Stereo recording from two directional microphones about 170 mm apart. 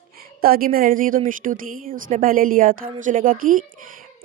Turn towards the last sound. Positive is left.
turn(degrees=-55)  # may be behind; listen again after turning